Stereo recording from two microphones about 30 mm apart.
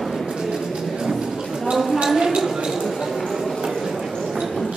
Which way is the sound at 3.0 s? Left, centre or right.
Centre.